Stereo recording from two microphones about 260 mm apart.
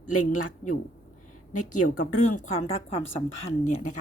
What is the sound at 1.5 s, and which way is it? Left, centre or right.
Speech, left.